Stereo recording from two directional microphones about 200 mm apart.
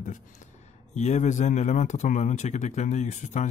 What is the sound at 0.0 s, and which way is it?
Speech, 40° left (ahead or behind).